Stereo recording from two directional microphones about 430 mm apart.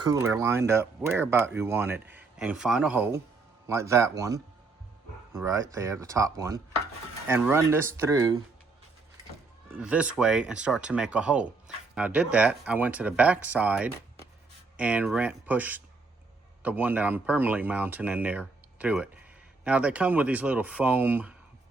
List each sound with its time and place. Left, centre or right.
0.0 s speech: centre
9.6 s speech: centre